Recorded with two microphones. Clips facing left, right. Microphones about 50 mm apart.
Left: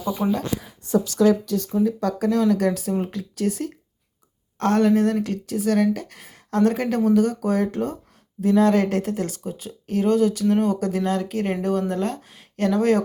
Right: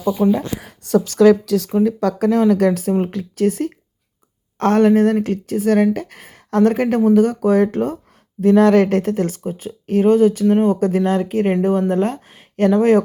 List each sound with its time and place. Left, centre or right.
0.2 s speech: right
0.6 s a sound: right
1.0 s speech: right